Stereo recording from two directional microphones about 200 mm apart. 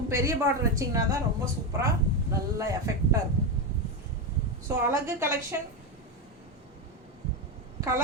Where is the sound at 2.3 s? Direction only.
15° right (ahead or behind).